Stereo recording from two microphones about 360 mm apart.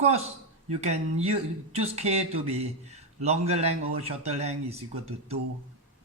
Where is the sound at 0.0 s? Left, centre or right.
Centre.